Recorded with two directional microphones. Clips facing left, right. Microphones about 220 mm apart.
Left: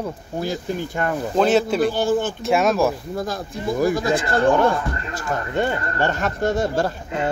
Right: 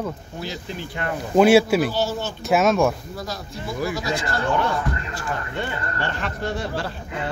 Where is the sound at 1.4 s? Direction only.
10° right (ahead or behind).